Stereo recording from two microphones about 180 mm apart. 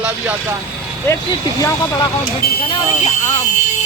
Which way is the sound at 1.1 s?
15° left (ahead or behind).